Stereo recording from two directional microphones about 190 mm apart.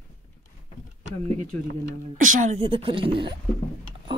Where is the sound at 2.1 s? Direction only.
45° right (ahead or behind).